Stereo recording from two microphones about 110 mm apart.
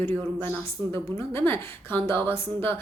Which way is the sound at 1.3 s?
20° left (ahead or behind).